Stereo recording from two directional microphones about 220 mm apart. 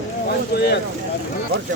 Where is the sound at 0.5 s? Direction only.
45° left (ahead or behind).